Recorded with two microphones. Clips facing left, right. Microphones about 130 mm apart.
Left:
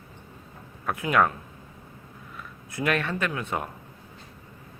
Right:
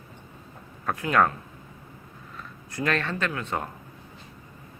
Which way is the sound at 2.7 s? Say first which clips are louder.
Left 1 dB; 15° left (ahead or behind).